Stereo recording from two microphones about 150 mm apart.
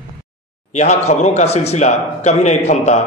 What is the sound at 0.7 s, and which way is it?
Speech, 50° left (ahead or behind).